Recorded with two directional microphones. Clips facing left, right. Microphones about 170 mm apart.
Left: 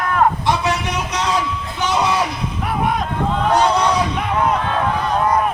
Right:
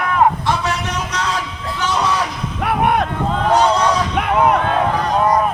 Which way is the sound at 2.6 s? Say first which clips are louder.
Right 4 dB; 65° right (ahead or behind).